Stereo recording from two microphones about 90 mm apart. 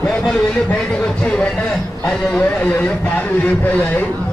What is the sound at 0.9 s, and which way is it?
Speech, 15° left (ahead or behind).